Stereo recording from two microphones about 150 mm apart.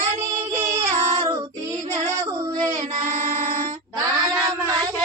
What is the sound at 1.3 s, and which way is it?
Child singing, 25° right (ahead or behind).